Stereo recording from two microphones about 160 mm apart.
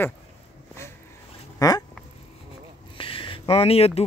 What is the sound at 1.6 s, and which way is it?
Duck, 25° left (ahead or behind).